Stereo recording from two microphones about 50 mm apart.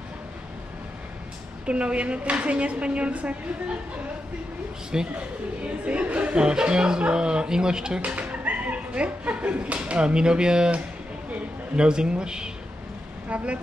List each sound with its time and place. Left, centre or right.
1.7 s speech: right
5.1 s speech: right
8.0 s speech: right
13.3 s speech: right